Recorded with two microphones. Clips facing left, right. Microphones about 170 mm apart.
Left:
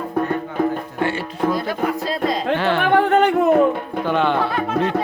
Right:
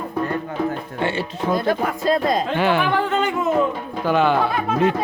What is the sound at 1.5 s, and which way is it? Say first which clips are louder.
Speech: right 1 dB; 50° right (ahead or behind).